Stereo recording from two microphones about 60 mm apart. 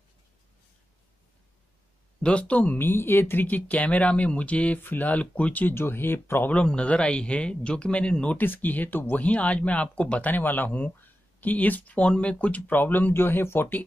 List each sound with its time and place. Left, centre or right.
2.2 s speech: centre
2.8 s speech: left
5.8 s speech: left
6.4 s a man's voice: centre
8.4 s speech: left